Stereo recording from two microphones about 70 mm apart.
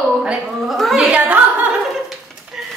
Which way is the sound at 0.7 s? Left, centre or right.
Centre.